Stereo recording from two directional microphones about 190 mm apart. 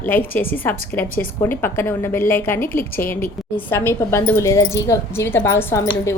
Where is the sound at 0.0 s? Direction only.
10° left (ahead or behind).